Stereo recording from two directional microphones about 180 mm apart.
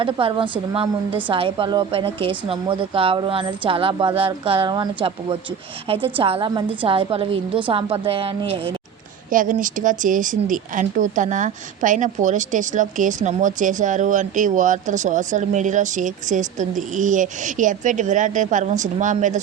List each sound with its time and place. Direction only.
0.0 s a woman's voice: 30° right (ahead or behind)
9.3 s speech: 50° right (ahead or behind)